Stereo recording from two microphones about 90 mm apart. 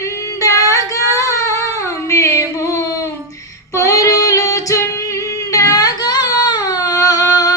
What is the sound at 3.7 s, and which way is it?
Female singing, 35° left (ahead or behind).